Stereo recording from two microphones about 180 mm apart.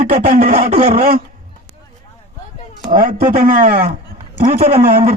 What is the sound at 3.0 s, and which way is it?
Speech, 50° right (ahead or behind).